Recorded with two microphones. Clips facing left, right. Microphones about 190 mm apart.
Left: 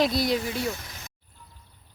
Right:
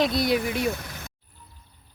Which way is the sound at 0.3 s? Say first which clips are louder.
Right 3 dB; 60° right (ahead or behind).